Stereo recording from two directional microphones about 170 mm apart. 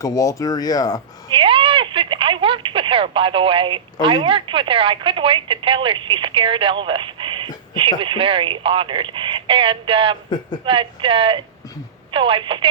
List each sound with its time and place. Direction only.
0.0 s speech: 20° left (ahead or behind)
1.3 s a sound: 30° right (ahead or behind)
4.0 s speech: 30° right (ahead or behind)